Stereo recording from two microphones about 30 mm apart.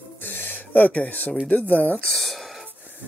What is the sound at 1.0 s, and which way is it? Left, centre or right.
Speech, left.